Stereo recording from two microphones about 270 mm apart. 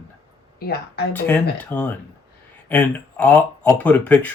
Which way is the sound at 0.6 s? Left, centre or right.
Left.